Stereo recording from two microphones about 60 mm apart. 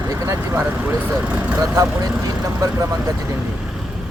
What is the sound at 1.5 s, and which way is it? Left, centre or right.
Speech, right.